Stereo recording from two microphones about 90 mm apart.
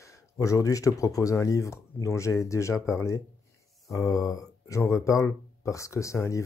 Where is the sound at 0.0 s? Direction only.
35° left (ahead or behind).